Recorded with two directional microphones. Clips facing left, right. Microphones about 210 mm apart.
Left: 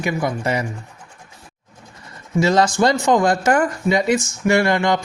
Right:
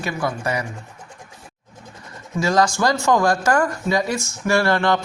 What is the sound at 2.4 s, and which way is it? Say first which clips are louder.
Speech: left 3 dB; 25° left (ahead or behind).